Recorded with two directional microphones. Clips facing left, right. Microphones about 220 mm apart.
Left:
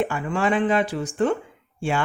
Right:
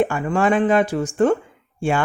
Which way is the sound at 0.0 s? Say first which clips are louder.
Right 5 dB; 45° right (ahead or behind).